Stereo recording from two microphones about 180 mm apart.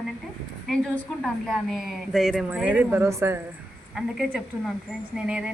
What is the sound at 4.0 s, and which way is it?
A woman's voice, centre (ahead or behind).